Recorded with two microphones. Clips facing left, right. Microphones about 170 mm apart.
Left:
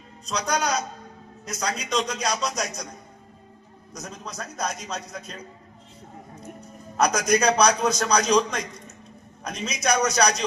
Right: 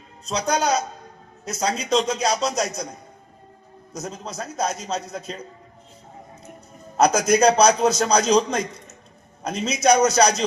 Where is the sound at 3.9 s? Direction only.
25° right (ahead or behind).